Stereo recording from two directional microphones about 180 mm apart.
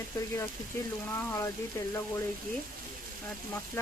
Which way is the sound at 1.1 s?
15° left (ahead or behind).